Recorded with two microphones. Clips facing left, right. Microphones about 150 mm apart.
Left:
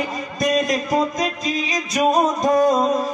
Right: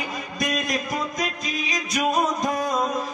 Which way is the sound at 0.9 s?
30° left (ahead or behind).